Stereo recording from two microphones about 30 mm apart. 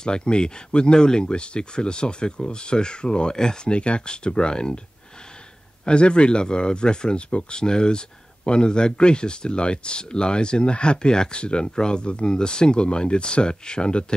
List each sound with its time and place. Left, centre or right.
0.0 s speech: left
3.7 s speech: left
5.9 s speech: left
7.2 s speech: left
7.5 s speech: left